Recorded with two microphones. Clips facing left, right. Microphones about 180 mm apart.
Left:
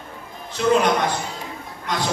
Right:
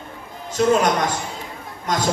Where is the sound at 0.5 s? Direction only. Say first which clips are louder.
Right 1 dB; 45° right (ahead or behind).